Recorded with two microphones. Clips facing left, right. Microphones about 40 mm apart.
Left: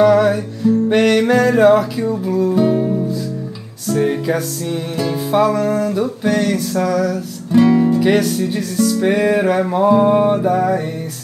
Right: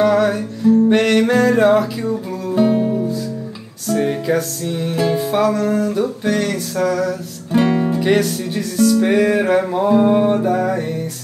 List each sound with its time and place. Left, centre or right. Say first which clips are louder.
0.0 s music: left 3 dB; centre
2.5 s music: right 4 dB; centre
3.8 s music: left 1 dB; centre
7.5 s music: left 4 dB; centre
8.0 s music: left 2 dB; centre